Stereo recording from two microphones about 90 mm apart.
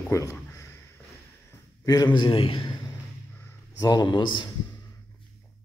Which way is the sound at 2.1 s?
75° left (ahead or behind).